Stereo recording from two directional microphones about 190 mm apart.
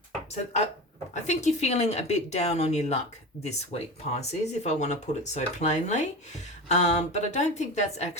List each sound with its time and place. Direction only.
1.1 s speech: 40° left (ahead or behind)